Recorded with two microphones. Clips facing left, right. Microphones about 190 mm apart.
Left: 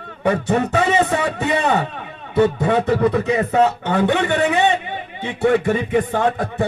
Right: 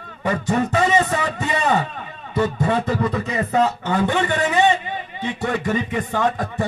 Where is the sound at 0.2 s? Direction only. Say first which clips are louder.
Left 3 dB; 60° left (ahead or behind).